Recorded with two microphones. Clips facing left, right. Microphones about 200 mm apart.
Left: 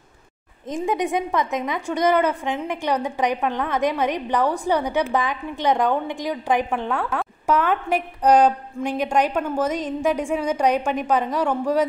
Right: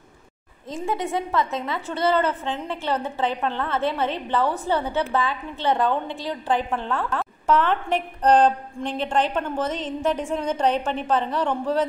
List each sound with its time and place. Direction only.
0.7 s a woman's voice: 15° left (ahead or behind)